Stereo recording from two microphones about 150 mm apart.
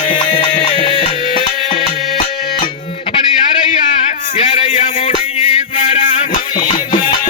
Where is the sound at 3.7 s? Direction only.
45° left (ahead or behind).